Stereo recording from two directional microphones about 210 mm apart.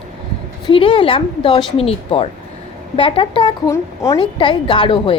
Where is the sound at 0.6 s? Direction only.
25° left (ahead or behind).